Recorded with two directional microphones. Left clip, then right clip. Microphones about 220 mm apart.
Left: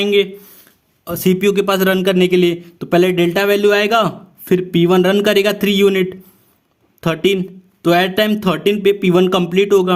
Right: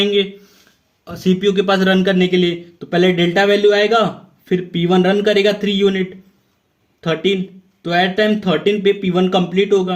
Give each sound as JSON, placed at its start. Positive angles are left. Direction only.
{"t": 0.0, "sound": "speech", "side_deg": 45}